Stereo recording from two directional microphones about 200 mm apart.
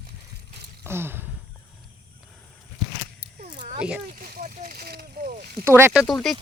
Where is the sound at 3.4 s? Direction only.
40° right (ahead or behind).